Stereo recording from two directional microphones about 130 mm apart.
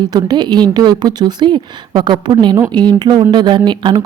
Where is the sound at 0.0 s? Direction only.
30° right (ahead or behind).